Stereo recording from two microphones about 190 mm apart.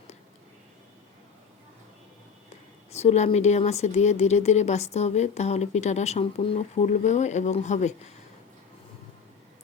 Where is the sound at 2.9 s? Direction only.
35° left (ahead or behind).